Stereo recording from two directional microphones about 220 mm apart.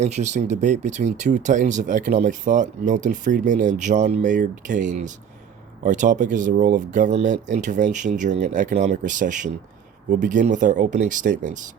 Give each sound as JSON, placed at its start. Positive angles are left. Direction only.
{"t": 0.0, "sound": "speech", "side_deg": -30}